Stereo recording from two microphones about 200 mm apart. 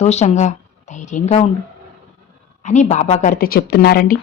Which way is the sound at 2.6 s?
35° left (ahead or behind).